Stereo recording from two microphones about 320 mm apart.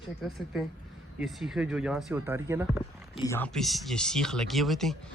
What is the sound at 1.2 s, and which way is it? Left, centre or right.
Speech, centre.